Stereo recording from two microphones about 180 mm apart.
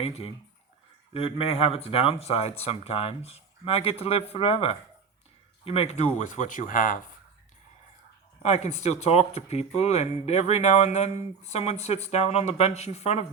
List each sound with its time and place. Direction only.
0.0 s speech: 35° left (ahead or behind)
8.4 s speech: 40° left (ahead or behind)